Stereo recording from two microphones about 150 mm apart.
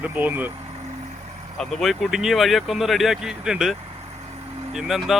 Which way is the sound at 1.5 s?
5° left (ahead or behind).